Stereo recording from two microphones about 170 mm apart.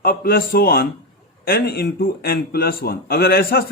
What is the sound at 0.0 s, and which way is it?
A man's voice, 60° left (ahead or behind).